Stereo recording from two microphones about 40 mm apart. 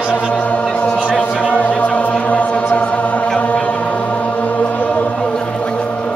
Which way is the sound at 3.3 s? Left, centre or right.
Left.